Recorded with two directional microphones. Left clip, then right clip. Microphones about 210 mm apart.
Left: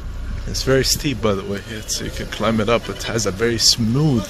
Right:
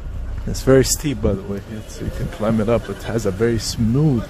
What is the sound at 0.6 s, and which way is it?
Speech, 30° right (ahead or behind).